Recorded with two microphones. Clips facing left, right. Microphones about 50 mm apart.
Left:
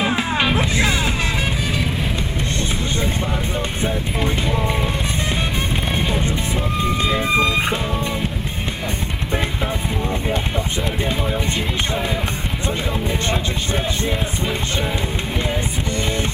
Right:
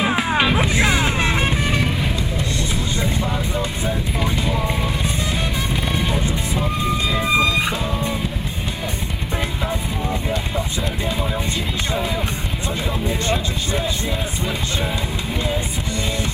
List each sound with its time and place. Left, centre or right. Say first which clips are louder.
0.0 s music: right 1 dB; centre
0.7 s music: right 1 dB; right
5.9 s music: left 1 dB; left
7.1 s vehicle: even; left